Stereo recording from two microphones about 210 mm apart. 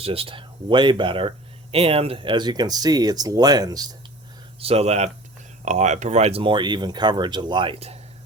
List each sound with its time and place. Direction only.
0.0 s speech: 25° right (ahead or behind)
4.6 s speech: 30° right (ahead or behind)